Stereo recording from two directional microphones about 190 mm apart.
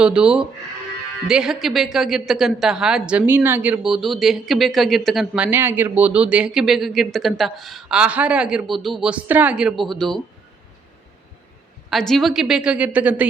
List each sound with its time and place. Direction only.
0.0 s a woman's voice: 5° right (ahead or behind)
11.9 s a woman's voice: centre (ahead or behind)